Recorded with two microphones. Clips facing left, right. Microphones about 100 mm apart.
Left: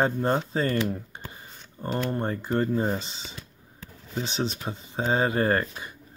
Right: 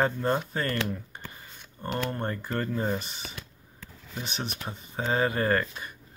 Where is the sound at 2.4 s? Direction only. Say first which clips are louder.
Left 5 dB; 20° left (ahead or behind).